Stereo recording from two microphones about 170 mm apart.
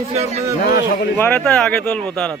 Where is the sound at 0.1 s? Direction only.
40° right (ahead or behind).